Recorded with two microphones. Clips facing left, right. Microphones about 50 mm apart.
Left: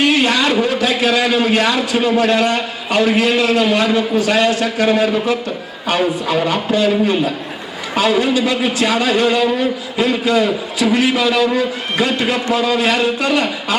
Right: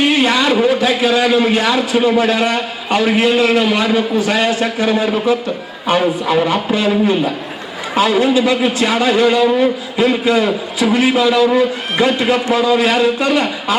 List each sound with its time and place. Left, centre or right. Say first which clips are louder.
0.0 s speech: right 1 dB; centre